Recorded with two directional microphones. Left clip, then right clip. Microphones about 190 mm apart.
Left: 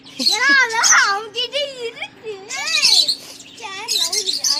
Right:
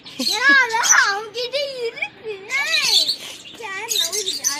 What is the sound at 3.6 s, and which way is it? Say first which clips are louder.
Chirp: right 1 dB; 35° left (ahead or behind).